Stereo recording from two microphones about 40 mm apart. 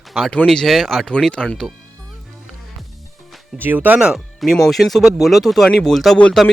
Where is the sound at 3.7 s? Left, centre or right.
Right.